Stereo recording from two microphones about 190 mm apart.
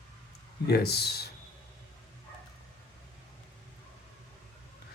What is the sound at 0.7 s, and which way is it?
Speech, 55° left (ahead or behind).